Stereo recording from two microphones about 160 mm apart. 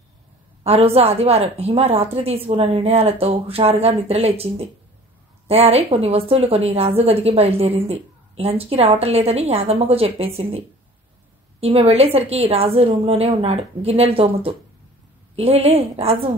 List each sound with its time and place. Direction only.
0.7 s a woman's voice: 40° right (ahead or behind)
11.6 s a woman's voice: 40° right (ahead or behind)